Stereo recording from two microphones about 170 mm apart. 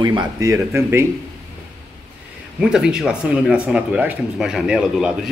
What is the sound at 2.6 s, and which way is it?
Speech, 5° right (ahead or behind).